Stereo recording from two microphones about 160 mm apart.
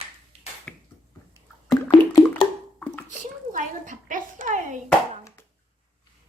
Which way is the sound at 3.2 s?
55° right (ahead or behind).